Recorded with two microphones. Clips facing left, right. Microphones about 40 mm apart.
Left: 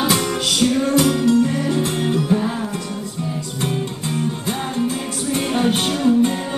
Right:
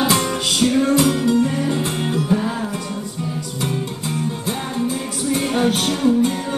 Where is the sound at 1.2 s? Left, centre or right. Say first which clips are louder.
Left 1 dB; right.